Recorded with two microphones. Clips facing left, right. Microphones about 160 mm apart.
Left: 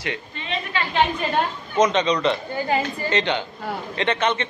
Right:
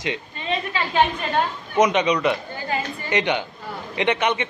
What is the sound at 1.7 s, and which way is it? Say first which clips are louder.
A man's voice: right 1 dB; 15° right (ahead or behind).